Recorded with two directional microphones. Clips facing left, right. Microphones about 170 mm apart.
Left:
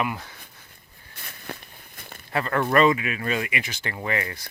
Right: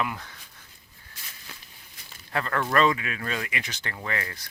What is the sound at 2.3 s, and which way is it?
Speech, 10° left (ahead or behind).